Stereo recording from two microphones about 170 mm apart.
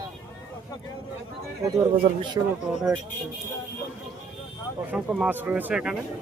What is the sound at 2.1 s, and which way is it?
Speech, 40° right (ahead or behind).